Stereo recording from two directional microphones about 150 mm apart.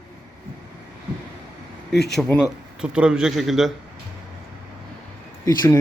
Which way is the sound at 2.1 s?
10° left (ahead or behind).